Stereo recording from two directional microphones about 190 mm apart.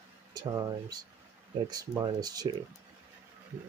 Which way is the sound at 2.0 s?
20° right (ahead or behind).